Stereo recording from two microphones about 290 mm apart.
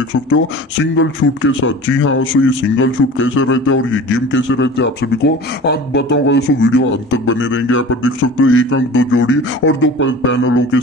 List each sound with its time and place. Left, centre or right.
0.9 s speech: left